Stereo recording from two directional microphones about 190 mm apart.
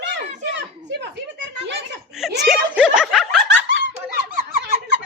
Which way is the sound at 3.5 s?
80° right.